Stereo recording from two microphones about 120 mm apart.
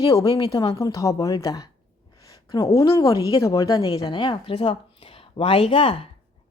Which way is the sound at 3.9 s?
40° left (ahead or behind).